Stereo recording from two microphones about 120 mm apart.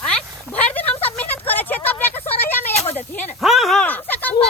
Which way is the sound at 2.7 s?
60° left (ahead or behind).